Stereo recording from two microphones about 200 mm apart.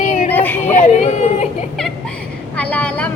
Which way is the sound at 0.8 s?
35° left (ahead or behind).